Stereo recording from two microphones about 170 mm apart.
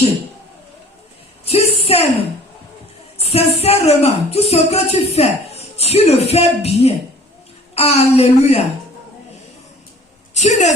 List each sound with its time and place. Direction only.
1.5 s a sound: 35° left (ahead or behind)
3.2 s music: 35° left (ahead or behind)
3.6 s speech: 35° left (ahead or behind)
10.3 s a woman's voice: 40° left (ahead or behind)